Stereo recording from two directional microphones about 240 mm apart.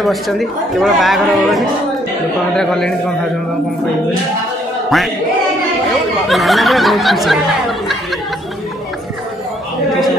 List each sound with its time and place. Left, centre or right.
0.0 s speech: centre
4.8 s speech: centre
6.2 s speech: centre